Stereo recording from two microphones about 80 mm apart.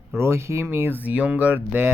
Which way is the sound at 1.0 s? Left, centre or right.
Centre.